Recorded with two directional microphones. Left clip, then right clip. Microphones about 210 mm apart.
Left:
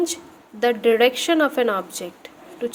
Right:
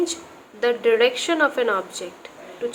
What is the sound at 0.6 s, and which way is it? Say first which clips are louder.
A woman's voice: left 1 dB; 40° left (ahead or behind).